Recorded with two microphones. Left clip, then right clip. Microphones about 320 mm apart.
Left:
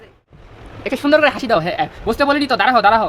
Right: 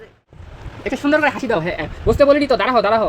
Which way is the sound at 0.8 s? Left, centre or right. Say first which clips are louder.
Left 3 dB; centre.